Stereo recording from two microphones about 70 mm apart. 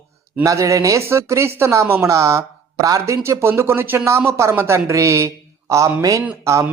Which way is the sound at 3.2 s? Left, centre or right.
Right.